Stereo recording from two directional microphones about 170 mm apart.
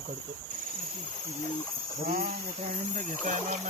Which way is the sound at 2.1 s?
60° right (ahead or behind).